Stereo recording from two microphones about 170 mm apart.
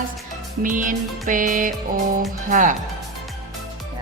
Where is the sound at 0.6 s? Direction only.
50° right (ahead or behind).